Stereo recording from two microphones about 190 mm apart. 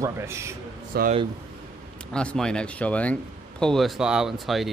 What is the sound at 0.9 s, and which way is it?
Speech, 55° right (ahead or behind).